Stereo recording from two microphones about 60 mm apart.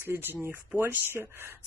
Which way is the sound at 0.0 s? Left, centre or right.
Right.